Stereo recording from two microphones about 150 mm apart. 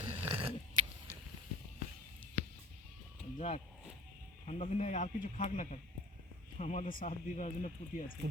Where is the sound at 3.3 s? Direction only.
45° left (ahead or behind).